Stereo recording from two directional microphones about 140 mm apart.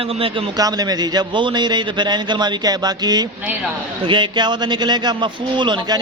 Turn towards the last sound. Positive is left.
turn(degrees=-35)  # may be behind; listen again after turning